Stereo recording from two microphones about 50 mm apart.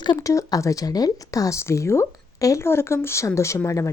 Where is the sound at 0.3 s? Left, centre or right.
Left.